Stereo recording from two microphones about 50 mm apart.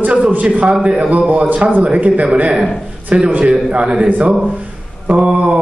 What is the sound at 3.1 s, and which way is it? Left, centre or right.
Speech, centre.